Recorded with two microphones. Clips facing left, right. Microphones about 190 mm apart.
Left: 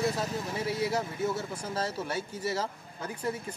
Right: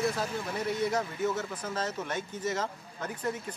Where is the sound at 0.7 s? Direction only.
5° left (ahead or behind).